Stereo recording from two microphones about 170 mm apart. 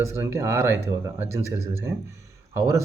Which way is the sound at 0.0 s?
15° right (ahead or behind).